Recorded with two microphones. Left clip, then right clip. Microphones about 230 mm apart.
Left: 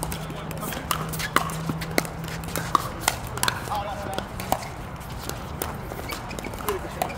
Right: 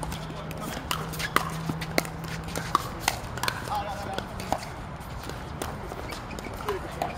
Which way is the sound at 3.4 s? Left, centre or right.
Left.